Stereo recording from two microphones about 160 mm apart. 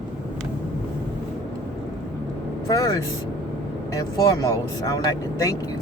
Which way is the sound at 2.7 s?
20° left (ahead or behind).